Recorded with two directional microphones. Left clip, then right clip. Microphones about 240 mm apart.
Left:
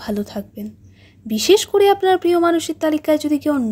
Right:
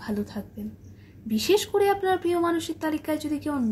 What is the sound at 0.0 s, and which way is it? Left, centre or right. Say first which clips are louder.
Speech: left 7 dB; left.